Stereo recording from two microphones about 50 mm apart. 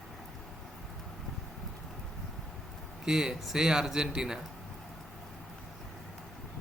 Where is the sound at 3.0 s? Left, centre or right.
Centre.